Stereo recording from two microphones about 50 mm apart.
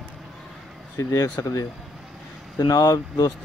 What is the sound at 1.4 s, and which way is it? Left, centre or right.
Speech, left.